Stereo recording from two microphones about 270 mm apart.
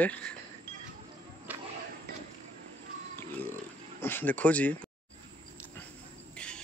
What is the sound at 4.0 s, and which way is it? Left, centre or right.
Speech, centre.